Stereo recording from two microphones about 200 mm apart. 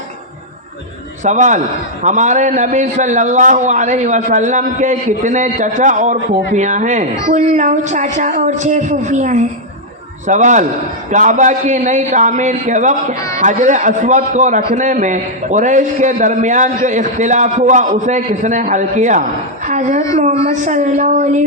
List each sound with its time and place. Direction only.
1.2 s a man's voice: 35° right (ahead or behind)
13.1 s speech: 15° left (ahead or behind)
13.4 s a man's voice: 40° right (ahead or behind)
19.6 s a sound: 40° right (ahead or behind)
20.4 s a man's voice: 35° right (ahead or behind)